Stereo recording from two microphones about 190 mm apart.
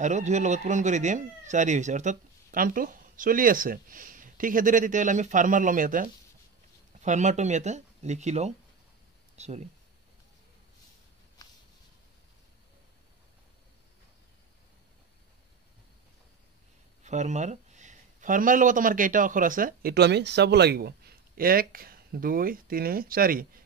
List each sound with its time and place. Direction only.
0.0 s speech: 40° right (ahead or behind)
17.0 s speech: 40° right (ahead or behind)